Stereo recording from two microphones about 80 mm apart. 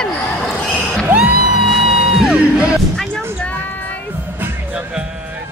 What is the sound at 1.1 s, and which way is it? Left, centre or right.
Music, centre.